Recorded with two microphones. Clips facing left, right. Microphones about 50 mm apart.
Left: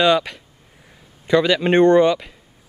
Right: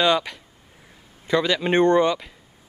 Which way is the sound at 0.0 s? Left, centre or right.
Centre.